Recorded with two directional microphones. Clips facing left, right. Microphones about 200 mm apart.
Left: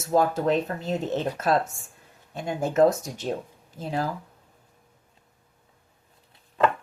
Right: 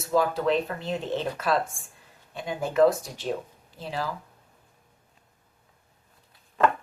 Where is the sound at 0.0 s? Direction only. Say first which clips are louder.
Left 2 dB; 45° left (ahead or behind).